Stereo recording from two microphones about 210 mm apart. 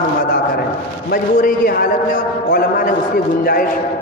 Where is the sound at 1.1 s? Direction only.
45° left (ahead or behind).